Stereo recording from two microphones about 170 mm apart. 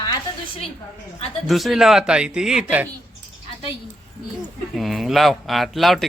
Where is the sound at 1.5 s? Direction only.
Centre (ahead or behind).